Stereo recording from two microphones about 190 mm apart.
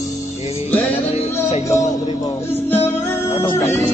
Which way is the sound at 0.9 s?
30° left (ahead or behind).